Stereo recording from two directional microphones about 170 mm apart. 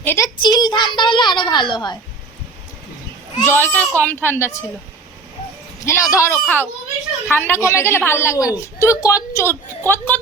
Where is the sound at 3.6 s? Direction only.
10° left (ahead or behind).